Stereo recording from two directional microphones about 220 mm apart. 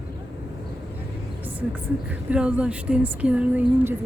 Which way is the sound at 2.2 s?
5° right (ahead or behind).